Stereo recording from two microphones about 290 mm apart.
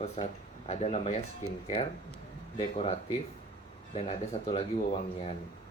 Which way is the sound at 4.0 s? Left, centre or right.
Centre.